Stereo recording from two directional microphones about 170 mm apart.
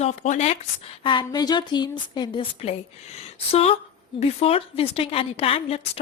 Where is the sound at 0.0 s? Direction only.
45° left (ahead or behind).